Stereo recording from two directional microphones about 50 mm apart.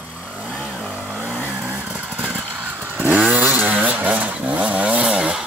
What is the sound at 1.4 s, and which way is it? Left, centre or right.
Vehicle, right.